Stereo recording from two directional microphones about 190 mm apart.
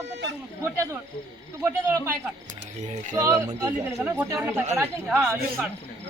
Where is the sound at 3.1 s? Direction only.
15° right (ahead or behind).